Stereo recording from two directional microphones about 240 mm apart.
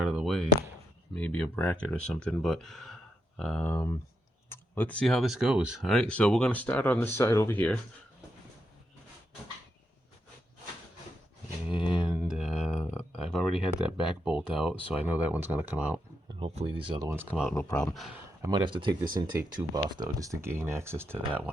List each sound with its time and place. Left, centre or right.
0.0 s a sound: centre
1.1 s speech: centre
11.9 s a sound: centre
13.9 s speech: centre
16.4 s speech: right; by 17.5 s centre
17.5 s speech: centre
17.8 s speech: centre